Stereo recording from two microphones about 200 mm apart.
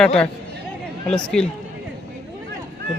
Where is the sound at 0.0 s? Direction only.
5° left (ahead or behind).